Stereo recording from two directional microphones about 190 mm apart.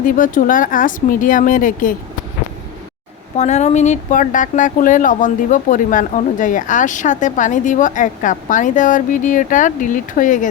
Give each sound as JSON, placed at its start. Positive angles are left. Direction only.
{"t": 0.0, "sound": "speech", "side_deg": 45}
{"t": 3.3, "sound": "speech", "side_deg": 35}